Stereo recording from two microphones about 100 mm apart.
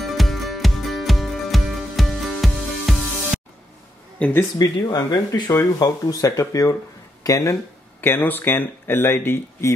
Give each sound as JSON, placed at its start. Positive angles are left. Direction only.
{"t": 0.0, "sound": "music", "side_deg": 0}
{"t": 4.2, "sound": "speech", "side_deg": 20}
{"t": 4.6, "sound": "speech", "side_deg": 45}
{"t": 8.0, "sound": "speech", "side_deg": 20}